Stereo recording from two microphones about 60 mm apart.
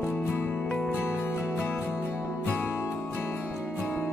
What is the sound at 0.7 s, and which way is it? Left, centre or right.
Music, centre.